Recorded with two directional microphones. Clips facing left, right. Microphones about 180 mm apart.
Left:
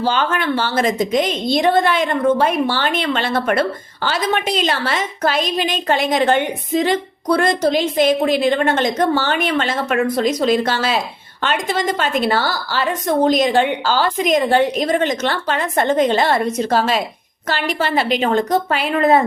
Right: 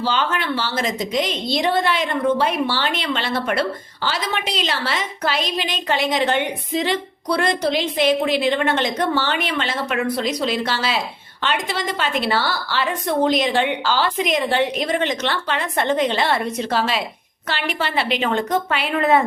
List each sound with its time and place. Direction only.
0.0 s a woman's voice: 50° left (ahead or behind)